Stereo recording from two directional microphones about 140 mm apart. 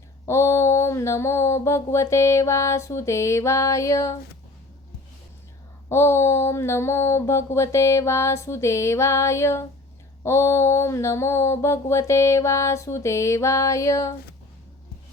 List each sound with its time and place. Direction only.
0.3 s mantra: 20° left (ahead or behind)
5.9 s mantra: 20° left (ahead or behind)